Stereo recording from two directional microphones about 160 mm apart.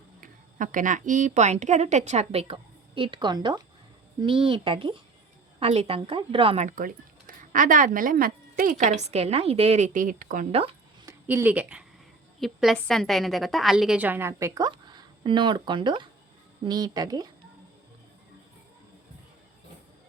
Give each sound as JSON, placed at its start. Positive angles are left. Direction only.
{"t": 0.2, "sound": "a woman's voice", "side_deg": -55}
{"t": 6.7, "sound": "speech", "side_deg": -60}
{"t": 8.8, "sound": "a woman's voice", "side_deg": -45}
{"t": 11.0, "sound": "a sound", "side_deg": -15}
{"t": 12.4, "sound": "a woman's voice", "side_deg": 0}